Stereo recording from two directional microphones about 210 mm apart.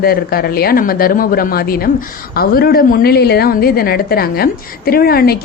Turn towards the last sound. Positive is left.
turn(degrees=45)  # may be behind; listen again after turning